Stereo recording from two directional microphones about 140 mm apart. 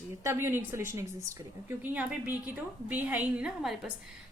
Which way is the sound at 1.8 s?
10° right (ahead or behind).